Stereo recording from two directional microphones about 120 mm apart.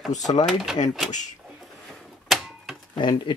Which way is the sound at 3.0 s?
40° left (ahead or behind).